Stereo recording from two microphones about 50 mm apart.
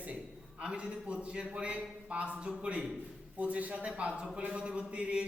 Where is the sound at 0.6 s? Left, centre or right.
Centre.